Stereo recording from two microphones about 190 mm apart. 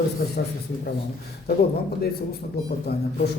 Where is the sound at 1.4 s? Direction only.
55° left (ahead or behind).